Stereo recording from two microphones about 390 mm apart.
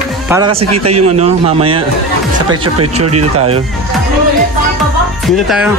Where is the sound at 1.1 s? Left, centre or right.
Centre.